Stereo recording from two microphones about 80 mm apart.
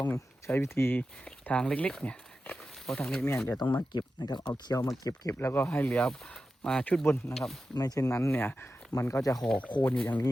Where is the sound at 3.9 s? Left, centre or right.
Left.